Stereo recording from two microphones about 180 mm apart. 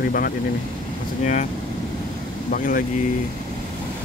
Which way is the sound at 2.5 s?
50° left (ahead or behind).